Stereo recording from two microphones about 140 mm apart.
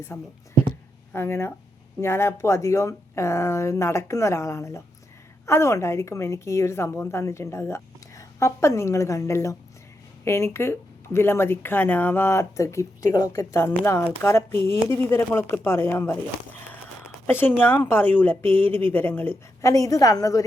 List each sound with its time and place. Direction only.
0.1 s a woman's voice: 15° left (ahead or behind)
17.2 s a woman's voice: 15° left (ahead or behind)